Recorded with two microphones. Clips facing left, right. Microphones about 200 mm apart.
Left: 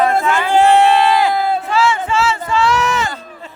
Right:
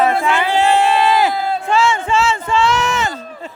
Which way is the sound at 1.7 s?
25° right (ahead or behind).